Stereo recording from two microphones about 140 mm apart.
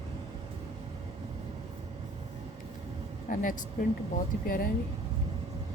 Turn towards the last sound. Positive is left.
turn(degrees=80)